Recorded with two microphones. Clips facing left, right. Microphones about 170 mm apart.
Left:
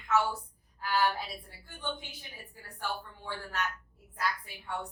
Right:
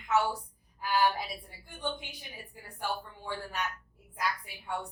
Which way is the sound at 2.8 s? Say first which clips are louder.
Right 2 dB; 15° right (ahead or behind).